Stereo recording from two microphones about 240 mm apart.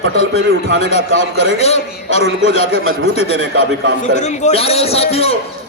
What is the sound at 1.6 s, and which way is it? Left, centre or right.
A man's voice, left.